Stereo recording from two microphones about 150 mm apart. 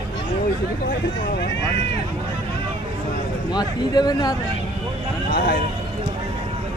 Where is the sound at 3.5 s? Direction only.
25° left (ahead or behind).